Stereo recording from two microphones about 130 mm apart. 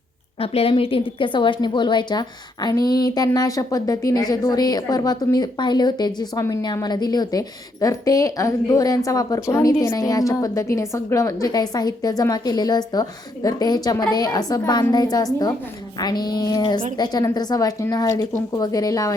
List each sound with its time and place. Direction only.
0.3 s a woman's voice: 45° left (ahead or behind); by 19.1 s 25° left (ahead or behind)